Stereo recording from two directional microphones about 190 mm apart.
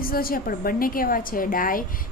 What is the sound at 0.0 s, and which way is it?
A woman's voice, 50° left (ahead or behind).